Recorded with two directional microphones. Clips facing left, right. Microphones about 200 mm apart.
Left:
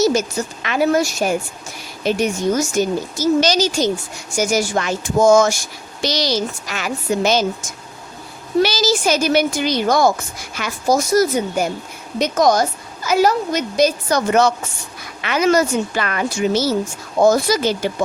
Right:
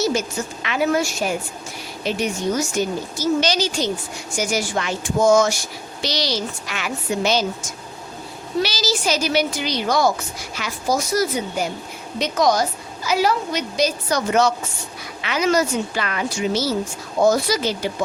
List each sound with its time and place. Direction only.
0.0 s a woman's voice: 40° left (ahead or behind)
8.6 s speech: 50° left (ahead or behind)